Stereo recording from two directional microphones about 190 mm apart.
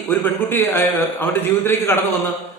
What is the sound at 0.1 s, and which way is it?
A man's voice, 10° left (ahead or behind).